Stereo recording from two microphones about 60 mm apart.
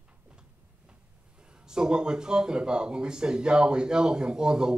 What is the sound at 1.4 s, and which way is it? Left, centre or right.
Speech, centre.